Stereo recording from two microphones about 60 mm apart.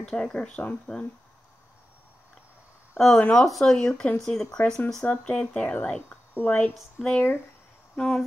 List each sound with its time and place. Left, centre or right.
0.0 s speech: centre
3.2 s speech: centre
6.0 s speech: left
8.0 s speech: centre